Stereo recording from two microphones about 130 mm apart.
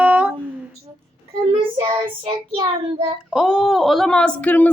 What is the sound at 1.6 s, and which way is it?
Child singing, 45° right (ahead or behind).